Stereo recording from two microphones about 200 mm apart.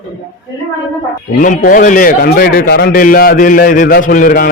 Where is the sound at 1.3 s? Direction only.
40° left (ahead or behind).